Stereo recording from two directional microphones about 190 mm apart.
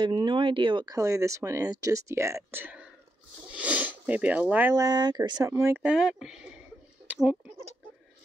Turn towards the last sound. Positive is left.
turn(degrees=-5)  # may be behind; listen again after turning